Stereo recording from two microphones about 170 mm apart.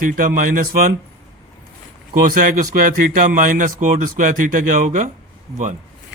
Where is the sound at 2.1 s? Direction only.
55° right (ahead or behind).